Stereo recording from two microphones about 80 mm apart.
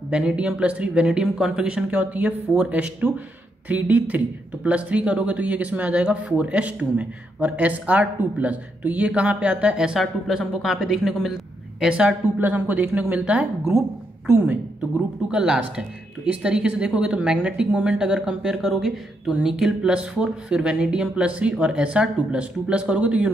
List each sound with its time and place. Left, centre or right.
0.1 s speech: centre
9.9 s speech: centre
12.4 s speech: right
15.3 s speech: centre